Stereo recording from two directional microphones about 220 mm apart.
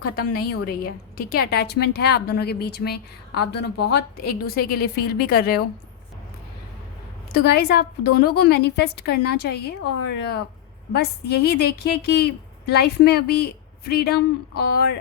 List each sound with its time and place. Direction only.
0.3 s a woman's voice: 45° left (ahead or behind)
7.3 s a woman's voice: 45° left (ahead or behind)